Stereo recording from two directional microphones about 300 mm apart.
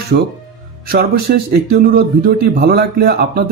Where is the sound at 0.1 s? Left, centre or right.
Right.